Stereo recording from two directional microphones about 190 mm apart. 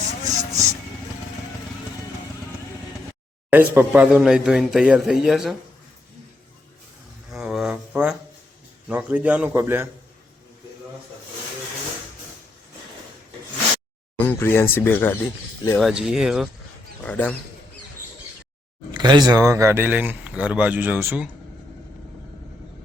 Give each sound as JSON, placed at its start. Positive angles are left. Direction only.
{"t": 0.3, "sound": "music", "side_deg": -15}
{"t": 3.5, "sound": "a man's voice", "side_deg": -10}
{"t": 7.3, "sound": "a sound", "side_deg": 0}
{"t": 8.9, "sound": "speech", "side_deg": -10}
{"t": 14.2, "sound": "speech", "side_deg": 10}
{"t": 15.8, "sound": "a man's voice", "side_deg": -5}
{"t": 17.0, "sound": "speech", "side_deg": 5}
{"t": 18.9, "sound": "speech", "side_deg": -20}